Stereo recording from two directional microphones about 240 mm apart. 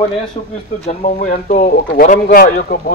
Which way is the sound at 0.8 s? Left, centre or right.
Left.